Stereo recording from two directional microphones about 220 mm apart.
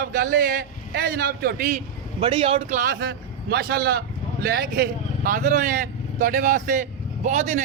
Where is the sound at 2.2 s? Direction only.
25° right (ahead or behind).